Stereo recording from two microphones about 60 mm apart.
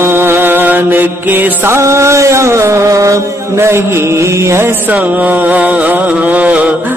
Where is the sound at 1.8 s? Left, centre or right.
Right.